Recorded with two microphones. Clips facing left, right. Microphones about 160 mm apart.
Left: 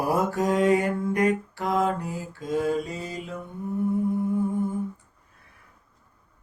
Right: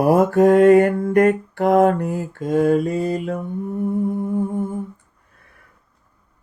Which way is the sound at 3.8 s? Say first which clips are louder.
Right 2 dB; 50° right (ahead or behind).